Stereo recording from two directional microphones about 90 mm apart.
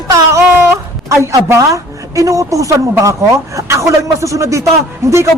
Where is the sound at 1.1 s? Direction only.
35° right (ahead or behind).